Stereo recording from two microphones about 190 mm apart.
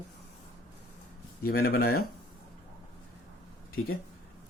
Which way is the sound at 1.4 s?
55° left (ahead or behind).